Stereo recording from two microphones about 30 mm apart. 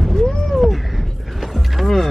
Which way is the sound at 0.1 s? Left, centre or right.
Left.